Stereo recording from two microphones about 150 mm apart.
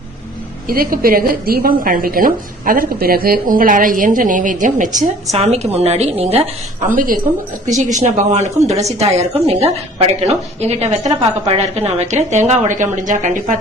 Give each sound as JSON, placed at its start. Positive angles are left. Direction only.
{"t": 0.7, "sound": "a woman's voice", "side_deg": -75}
{"t": 3.5, "sound": "a woman's voice", "side_deg": -65}
{"t": 5.4, "sound": "a woman's voice", "side_deg": -45}
{"t": 6.8, "sound": "a woman's voice", "side_deg": -65}